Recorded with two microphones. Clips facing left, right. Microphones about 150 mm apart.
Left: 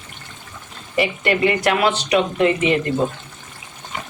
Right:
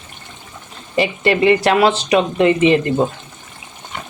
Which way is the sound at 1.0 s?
30° right (ahead or behind).